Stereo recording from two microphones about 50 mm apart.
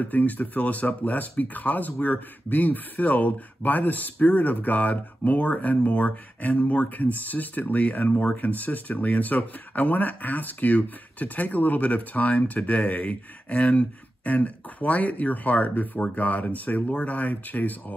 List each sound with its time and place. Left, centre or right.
0.0 s speech: left